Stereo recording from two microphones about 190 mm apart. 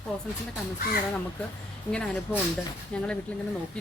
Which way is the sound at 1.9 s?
5° left (ahead or behind).